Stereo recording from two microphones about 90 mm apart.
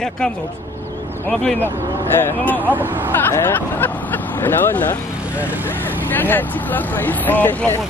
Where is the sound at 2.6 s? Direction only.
20° right (ahead or behind).